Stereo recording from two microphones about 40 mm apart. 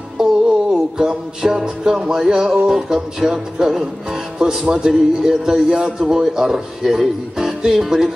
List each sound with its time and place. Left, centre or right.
0.2 s music: centre
0.7 s speech: centre